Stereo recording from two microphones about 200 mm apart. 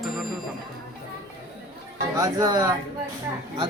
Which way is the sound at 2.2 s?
20° right (ahead or behind).